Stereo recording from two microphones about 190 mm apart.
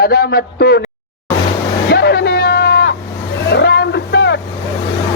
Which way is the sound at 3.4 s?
60° left (ahead or behind).